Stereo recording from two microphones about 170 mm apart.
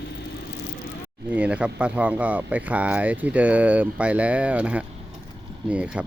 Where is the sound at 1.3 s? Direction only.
5° right (ahead or behind).